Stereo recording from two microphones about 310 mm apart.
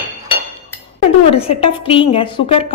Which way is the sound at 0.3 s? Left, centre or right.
Centre.